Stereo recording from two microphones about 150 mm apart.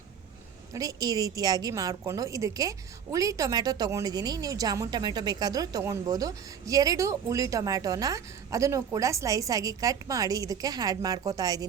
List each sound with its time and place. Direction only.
0.7 s a woman's voice: 25° right (ahead or behind)